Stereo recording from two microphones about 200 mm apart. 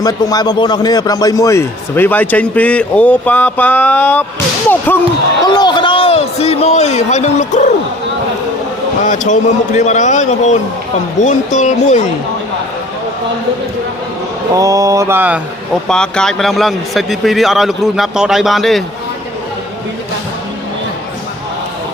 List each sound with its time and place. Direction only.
0.0 s a man's voice: 20° left (ahead or behind)
5.5 s a man's voice: 20° left (ahead or behind)
9.0 s a man's voice: 40° left (ahead or behind)
14.5 s mantra: 15° right (ahead or behind)
15.9 s a man's voice: 5° left (ahead or behind)